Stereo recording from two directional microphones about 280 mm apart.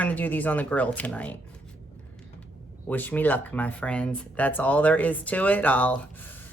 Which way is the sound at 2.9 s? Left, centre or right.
Centre.